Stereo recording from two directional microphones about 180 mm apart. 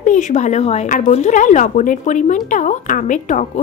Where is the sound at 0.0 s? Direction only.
45° left (ahead or behind).